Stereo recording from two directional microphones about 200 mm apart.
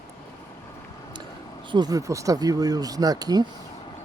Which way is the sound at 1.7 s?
20° right (ahead or behind).